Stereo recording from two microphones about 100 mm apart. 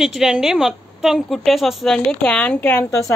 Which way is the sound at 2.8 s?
30° left (ahead or behind).